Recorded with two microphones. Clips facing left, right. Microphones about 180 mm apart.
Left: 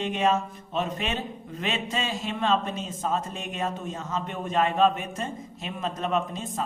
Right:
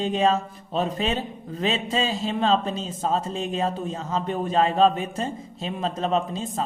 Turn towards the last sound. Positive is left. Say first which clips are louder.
# right 3 dB
turn(degrees=-30)  # may be behind; listen again after turning